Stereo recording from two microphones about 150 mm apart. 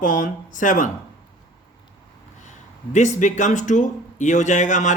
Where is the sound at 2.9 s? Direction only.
55° left (ahead or behind).